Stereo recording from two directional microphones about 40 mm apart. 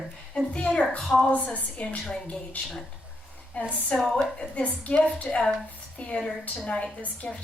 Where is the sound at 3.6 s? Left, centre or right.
Left.